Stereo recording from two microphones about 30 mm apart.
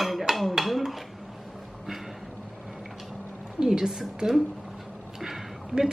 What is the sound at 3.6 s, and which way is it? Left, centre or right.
Speech, centre.